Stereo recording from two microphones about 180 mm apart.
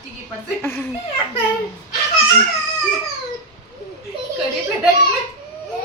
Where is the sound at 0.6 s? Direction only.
10° left (ahead or behind).